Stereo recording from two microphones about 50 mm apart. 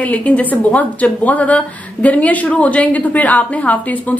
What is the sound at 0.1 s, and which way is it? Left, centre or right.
A woman's voice, left.